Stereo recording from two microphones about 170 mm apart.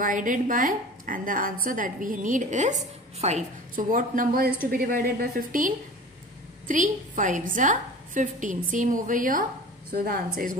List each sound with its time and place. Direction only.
0.0 s a woman's voice: 50° right (ahead or behind)